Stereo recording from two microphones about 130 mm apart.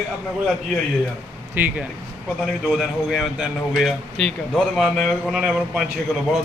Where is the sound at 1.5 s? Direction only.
15° right (ahead or behind).